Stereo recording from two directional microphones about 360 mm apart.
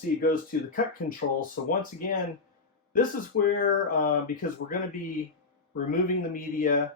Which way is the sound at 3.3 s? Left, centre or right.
Left.